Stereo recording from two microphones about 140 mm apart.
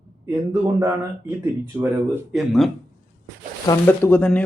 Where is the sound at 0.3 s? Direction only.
25° right (ahead or behind).